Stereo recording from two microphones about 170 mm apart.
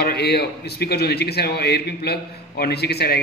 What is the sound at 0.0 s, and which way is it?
A man's voice, 70° left (ahead or behind).